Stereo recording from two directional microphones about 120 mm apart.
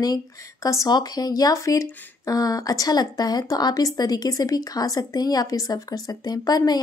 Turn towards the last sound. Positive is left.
turn(degrees=30)  # may be behind; listen again after turning